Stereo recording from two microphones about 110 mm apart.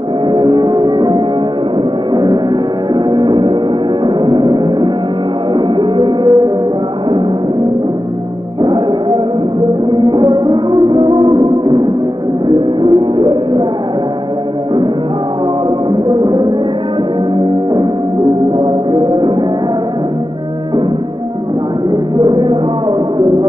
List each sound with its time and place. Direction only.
0.3 s music: 40° right (ahead or behind)
8.5 s music: 45° right (ahead or behind)
15.9 s music: 40° right (ahead or behind)
18.6 s music: 45° right (ahead or behind)
22.2 s music: 45° right (ahead or behind)